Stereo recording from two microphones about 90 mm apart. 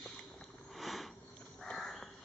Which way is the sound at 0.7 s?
Centre (ahead or behind).